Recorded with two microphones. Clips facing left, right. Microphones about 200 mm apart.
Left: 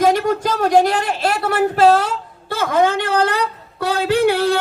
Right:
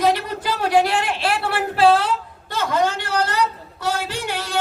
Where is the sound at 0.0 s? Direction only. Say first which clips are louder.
Left 5 dB; 45° left (ahead or behind).